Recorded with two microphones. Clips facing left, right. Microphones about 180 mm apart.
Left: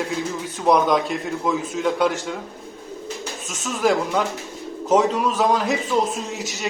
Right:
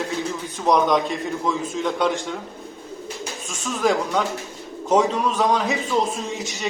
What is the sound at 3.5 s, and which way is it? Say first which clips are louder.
A man's voice: left 1 dB; centre (ahead or behind).